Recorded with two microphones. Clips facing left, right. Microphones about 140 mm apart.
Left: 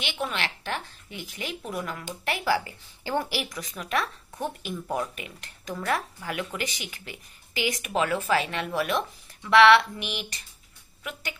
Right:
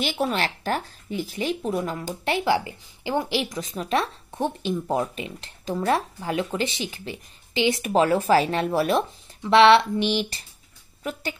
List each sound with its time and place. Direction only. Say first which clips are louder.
0.0 s speech: right 6 dB; 40° right (ahead or behind)